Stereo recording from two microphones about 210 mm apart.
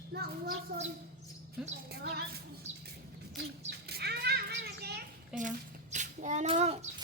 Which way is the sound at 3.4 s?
50° right (ahead or behind).